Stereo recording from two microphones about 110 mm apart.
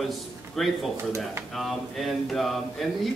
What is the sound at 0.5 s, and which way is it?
Speech, centre (ahead or behind).